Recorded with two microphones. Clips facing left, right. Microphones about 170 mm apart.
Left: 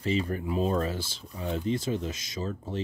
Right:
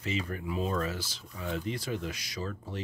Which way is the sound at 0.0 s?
30° left (ahead or behind).